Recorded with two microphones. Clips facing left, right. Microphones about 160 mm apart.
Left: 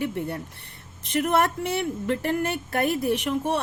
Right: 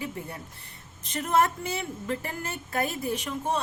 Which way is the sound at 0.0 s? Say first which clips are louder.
Left 8 dB; 65° left (ahead or behind).